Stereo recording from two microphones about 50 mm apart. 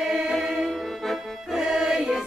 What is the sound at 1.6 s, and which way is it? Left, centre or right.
Music, centre.